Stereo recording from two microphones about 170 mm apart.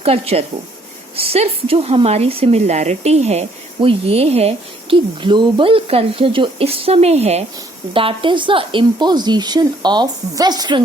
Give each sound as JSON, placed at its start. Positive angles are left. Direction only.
{"t": 0.0, "sound": "a woman's voice", "side_deg": -35}